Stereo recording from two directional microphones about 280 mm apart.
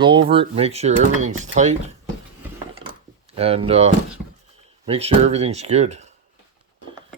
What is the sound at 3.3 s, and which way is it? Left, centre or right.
Speech, right.